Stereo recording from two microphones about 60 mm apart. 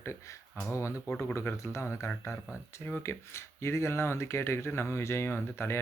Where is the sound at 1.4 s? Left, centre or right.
Left.